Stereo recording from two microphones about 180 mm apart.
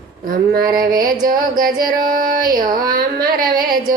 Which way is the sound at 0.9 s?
20° right (ahead or behind).